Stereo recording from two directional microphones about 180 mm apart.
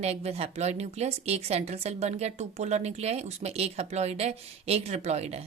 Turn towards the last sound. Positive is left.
turn(degrees=-35)  # may be behind; listen again after turning